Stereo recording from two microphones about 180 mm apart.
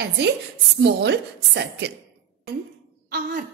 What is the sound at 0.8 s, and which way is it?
A woman's voice, 75° right (ahead or behind).